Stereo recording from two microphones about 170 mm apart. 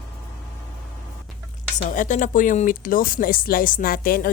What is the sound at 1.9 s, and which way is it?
Speech, 50° left (ahead or behind).